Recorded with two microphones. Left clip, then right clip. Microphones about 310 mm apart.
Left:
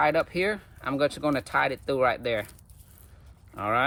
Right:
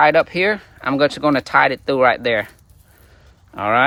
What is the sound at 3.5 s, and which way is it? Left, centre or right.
Speech, right.